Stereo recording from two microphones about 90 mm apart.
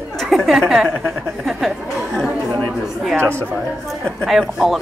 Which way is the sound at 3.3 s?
15° left (ahead or behind).